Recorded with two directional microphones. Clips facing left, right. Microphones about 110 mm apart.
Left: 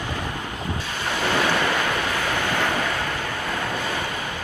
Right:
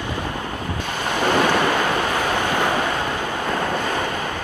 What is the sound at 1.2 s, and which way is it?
Waves, 15° right (ahead or behind).